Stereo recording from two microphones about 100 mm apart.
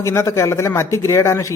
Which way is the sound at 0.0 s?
30° left (ahead or behind).